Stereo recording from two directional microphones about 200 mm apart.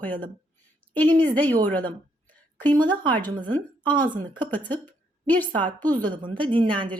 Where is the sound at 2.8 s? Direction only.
20° right (ahead or behind).